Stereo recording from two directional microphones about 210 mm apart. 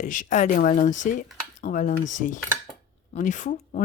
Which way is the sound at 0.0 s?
40° left (ahead or behind).